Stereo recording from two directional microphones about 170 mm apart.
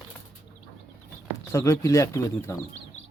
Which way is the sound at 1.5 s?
15° left (ahead or behind).